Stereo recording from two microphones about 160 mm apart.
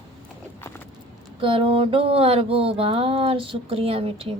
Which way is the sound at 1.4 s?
35° right (ahead or behind).